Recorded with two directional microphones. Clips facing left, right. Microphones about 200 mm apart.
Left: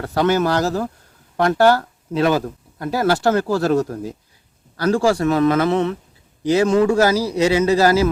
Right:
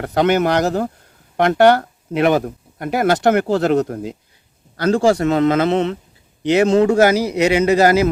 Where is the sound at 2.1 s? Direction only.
20° right (ahead or behind).